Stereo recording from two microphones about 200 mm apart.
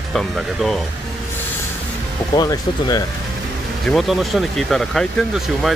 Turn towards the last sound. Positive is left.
turn(degrees=0)  # may be behind; listen again after turning